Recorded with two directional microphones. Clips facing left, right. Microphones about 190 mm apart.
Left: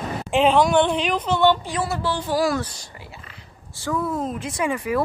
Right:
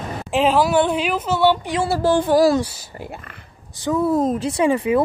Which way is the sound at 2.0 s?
50° right (ahead or behind).